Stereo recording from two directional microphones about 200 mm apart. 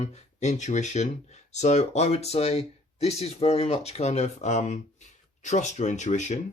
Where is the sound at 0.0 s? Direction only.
35° left (ahead or behind).